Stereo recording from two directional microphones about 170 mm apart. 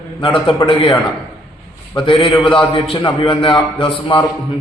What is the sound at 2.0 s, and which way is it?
A man's voice, 30° left (ahead or behind).